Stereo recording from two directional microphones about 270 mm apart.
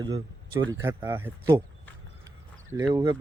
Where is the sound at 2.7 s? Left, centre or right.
Centre.